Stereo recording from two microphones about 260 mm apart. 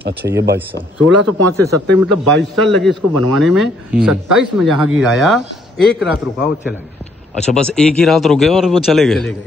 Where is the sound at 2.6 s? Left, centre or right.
Centre.